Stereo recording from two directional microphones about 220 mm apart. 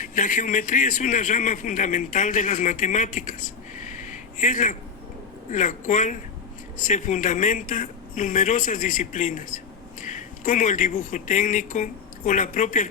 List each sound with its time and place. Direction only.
0.0 s a man's voice: 35° left (ahead or behind)
3.8 s a sound: 35° left (ahead or behind)
5.5 s a man's voice: 35° left (ahead or behind)